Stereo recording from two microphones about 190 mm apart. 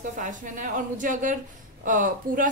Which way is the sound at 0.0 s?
40° right (ahead or behind).